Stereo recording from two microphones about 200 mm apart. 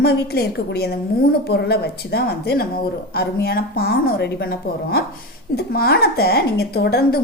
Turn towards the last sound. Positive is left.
turn(degrees=50)  # may be behind; listen again after turning